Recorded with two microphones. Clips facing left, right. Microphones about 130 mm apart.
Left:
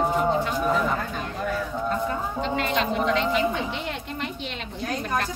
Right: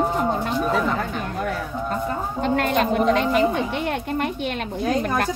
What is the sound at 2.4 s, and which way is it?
A woman's voice, 50° right (ahead or behind).